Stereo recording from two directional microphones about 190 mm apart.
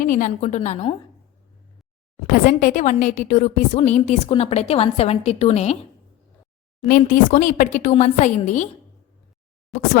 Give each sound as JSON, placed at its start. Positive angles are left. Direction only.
{"t": 0.0, "sound": "a woman's voice", "side_deg": 40}
{"t": 2.3, "sound": "a woman's voice", "side_deg": 45}
{"t": 6.8, "sound": "a woman's voice", "side_deg": 45}